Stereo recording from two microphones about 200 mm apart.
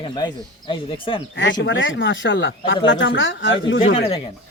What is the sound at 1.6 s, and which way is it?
Speech, 70° left (ahead or behind).